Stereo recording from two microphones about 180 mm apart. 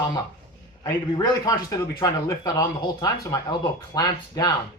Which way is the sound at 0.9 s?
20° left (ahead or behind).